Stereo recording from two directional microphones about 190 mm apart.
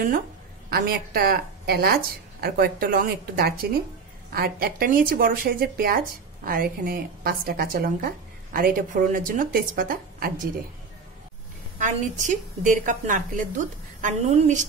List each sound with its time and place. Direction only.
0.7 s speech: 55° right (ahead or behind)
11.8 s a woman's voice: 40° right (ahead or behind)